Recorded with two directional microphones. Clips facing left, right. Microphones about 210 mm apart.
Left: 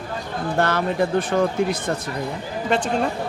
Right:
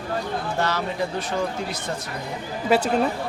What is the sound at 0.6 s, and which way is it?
Speech, 55° left (ahead or behind).